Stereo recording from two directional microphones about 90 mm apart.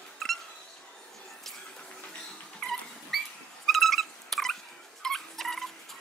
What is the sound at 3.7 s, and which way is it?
Cat, centre (ahead or behind).